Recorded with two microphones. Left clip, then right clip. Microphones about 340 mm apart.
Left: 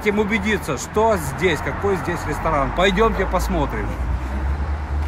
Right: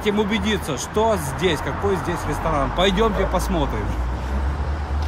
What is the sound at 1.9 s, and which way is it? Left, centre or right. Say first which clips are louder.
Speech: left 1 dB; left.